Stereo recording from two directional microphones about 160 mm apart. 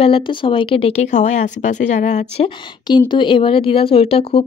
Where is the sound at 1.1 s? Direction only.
50° left (ahead or behind).